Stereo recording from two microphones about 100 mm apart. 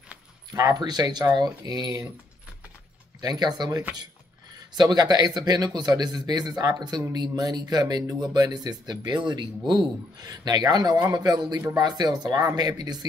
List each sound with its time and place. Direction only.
0.5 s speech: 40° right (ahead or behind)
3.2 s speech: 40° right (ahead or behind)